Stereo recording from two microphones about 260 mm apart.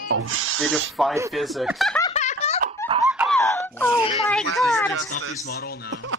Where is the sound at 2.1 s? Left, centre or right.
Left.